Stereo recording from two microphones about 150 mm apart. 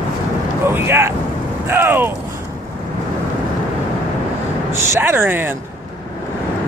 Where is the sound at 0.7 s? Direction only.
15° right (ahead or behind).